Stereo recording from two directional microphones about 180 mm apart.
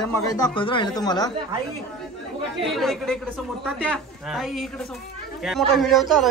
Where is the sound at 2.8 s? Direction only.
Centre (ahead or behind).